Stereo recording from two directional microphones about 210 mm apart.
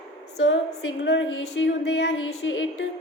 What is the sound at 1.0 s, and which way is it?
Speech, 60° left (ahead or behind).